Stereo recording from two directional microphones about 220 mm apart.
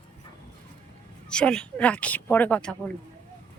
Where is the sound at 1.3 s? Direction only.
5° left (ahead or behind).